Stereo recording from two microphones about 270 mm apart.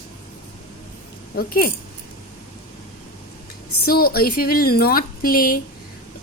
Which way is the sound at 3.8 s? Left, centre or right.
Left.